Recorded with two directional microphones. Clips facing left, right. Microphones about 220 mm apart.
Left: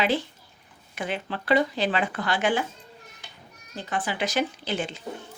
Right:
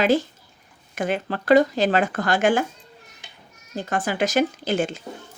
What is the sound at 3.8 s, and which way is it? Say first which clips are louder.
Speech: right 5 dB; 45° right (ahead or behind).